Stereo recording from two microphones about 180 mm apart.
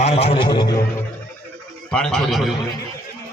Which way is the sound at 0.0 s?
35° left (ahead or behind).